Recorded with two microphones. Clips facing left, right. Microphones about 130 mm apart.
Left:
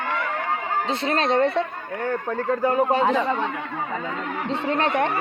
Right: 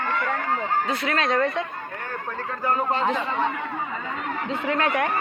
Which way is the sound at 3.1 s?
40° left (ahead or behind).